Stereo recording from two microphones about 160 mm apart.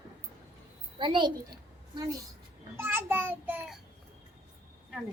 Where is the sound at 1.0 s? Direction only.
30° right (ahead or behind).